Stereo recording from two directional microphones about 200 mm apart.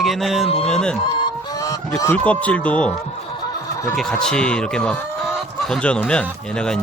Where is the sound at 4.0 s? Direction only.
5° left (ahead or behind).